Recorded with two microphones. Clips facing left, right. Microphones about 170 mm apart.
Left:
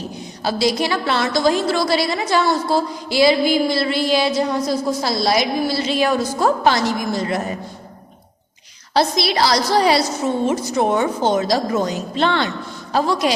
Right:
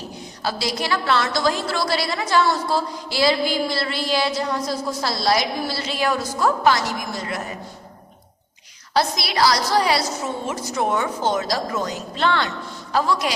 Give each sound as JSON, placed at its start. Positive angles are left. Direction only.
{"t": 0.4, "sound": "a woman's voice", "side_deg": 20}
{"t": 8.9, "sound": "a woman's voice", "side_deg": 25}